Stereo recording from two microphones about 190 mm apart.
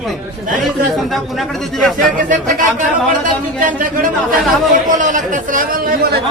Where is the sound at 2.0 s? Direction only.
45° right (ahead or behind).